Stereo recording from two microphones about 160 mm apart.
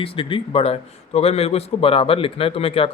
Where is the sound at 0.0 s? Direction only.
35° left (ahead or behind).